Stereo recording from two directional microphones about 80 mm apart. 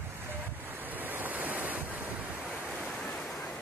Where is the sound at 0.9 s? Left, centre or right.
Right.